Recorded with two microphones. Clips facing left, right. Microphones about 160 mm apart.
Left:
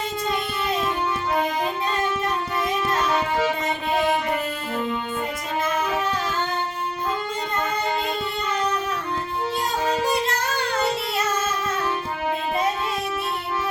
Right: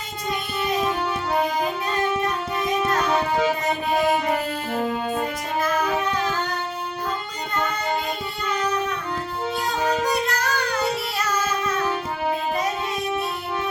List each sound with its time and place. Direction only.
10.0 s music: 25° left (ahead or behind)